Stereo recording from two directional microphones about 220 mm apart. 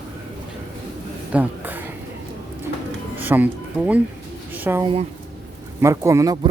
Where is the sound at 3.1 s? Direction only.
10° right (ahead or behind).